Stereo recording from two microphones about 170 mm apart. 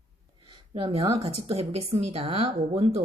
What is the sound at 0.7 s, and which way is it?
A woman's voice, 30° right (ahead or behind).